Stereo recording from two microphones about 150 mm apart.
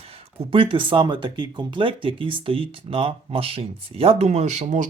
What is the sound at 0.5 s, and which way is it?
Speech, 35° right (ahead or behind).